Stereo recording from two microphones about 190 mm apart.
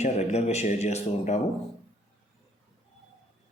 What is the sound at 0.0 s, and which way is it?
Speech, 35° left (ahead or behind).